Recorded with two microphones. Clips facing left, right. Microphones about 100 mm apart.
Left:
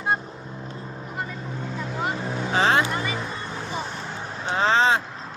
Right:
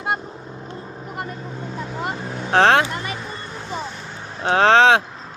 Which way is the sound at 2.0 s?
65° right (ahead or behind).